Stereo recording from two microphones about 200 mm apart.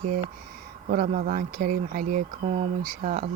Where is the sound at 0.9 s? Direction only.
45° right (ahead or behind).